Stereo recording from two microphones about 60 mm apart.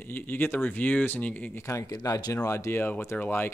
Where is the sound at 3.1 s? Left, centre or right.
Left.